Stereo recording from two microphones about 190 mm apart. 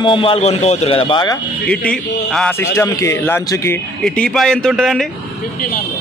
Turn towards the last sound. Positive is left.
turn(degrees=0)  # may be behind; listen again after turning